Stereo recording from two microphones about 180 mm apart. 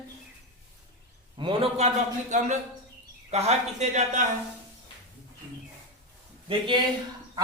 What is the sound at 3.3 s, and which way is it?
Speech, 35° right (ahead or behind).